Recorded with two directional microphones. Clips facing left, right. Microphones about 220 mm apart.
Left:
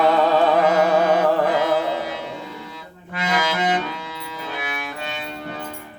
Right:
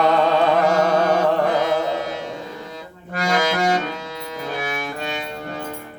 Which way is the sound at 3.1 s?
45° right (ahead or behind).